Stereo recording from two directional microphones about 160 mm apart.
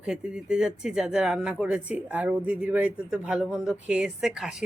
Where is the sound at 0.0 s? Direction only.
5° right (ahead or behind).